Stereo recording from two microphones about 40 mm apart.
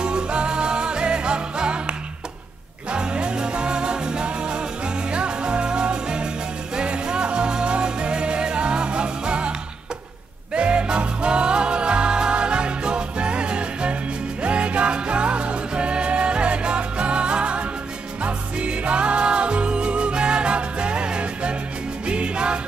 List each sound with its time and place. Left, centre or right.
0.0 s music: right
10.5 s music: right